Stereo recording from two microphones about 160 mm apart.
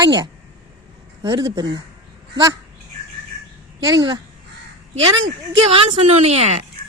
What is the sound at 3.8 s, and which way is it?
Speech, 25° right (ahead or behind).